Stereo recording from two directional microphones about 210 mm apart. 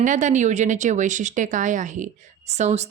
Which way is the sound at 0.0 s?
35° right (ahead or behind).